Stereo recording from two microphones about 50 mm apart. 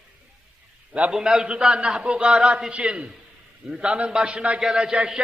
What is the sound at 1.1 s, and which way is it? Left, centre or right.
A man's voice, centre.